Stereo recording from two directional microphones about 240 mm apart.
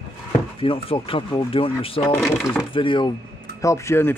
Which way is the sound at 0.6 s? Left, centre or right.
Left.